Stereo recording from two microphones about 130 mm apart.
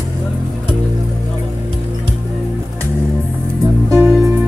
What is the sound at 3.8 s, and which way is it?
Music, 20° right (ahead or behind).